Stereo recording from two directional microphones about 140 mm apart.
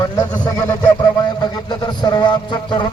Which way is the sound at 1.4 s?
30° left (ahead or behind).